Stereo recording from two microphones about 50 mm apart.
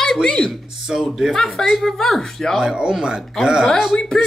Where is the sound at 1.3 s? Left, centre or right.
Centre.